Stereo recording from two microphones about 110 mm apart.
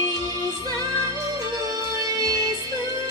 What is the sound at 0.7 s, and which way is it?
Music, 35° right (ahead or behind).